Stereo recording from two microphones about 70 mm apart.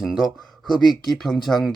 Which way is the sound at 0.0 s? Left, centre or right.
Centre.